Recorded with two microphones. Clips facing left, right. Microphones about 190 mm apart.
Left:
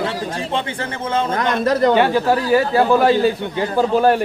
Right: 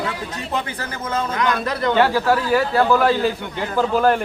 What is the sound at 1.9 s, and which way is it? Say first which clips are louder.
A man's voice: left 2 dB; 20° left (ahead or behind).